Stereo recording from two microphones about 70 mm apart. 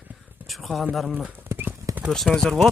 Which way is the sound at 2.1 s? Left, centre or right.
Centre.